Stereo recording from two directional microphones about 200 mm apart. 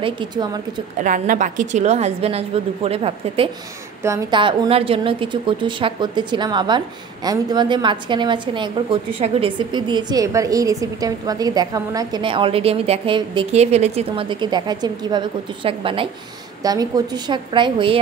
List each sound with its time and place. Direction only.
0.0 s a woman's voice: 20° right (ahead or behind)
0.9 s a woman's voice: 40° right (ahead or behind)
4.0 s a woman's voice: 20° right (ahead or behind)